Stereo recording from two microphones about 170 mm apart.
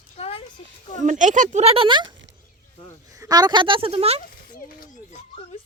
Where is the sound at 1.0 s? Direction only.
45° right (ahead or behind).